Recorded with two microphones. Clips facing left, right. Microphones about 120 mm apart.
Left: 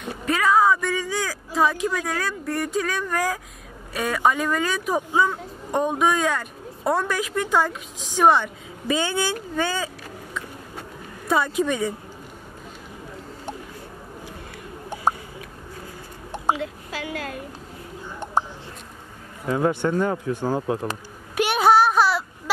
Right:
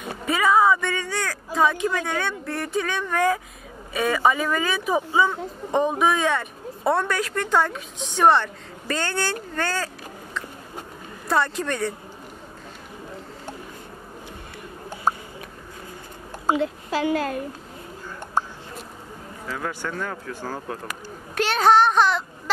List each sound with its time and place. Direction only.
0.0 s speech: centre (ahead or behind)
11.2 s speech: 5° left (ahead or behind)
16.5 s a woman's voice: 35° right (ahead or behind)
19.5 s speech: 25° left (ahead or behind)
21.4 s speech: 10° left (ahead or behind)